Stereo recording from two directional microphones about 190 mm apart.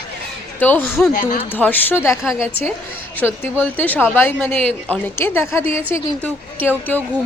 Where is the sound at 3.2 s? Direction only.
10° left (ahead or behind).